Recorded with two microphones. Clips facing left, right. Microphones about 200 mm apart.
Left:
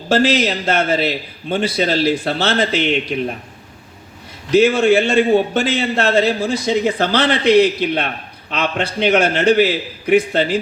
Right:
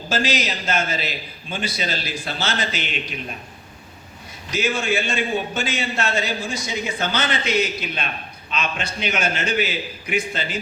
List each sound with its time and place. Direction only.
0.1 s a man's voice: 65° left (ahead or behind)
4.5 s a man's voice: 65° left (ahead or behind)